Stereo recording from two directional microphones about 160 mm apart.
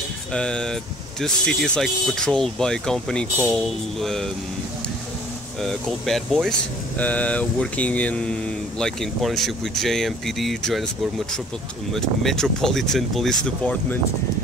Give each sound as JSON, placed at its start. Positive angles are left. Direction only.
{"t": 0.3, "sound": "speech", "side_deg": 5}
{"t": 5.6, "sound": "speech", "side_deg": 0}
{"t": 11.9, "sound": "speech", "side_deg": 0}